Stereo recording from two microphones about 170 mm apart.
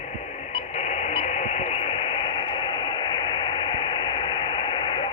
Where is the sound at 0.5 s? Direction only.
40° left (ahead or behind).